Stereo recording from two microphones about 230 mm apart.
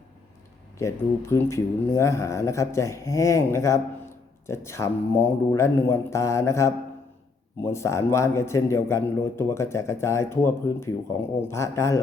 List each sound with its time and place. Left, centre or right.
0.8 s a man's voice: centre